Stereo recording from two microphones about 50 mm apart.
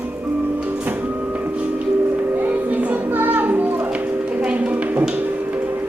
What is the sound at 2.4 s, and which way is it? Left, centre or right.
Music, right.